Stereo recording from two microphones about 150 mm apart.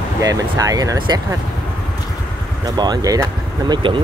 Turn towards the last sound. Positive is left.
turn(degrees=-30)  # may be behind; listen again after turning